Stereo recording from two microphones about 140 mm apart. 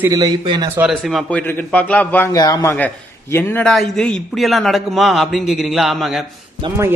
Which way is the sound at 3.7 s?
5° left (ahead or behind).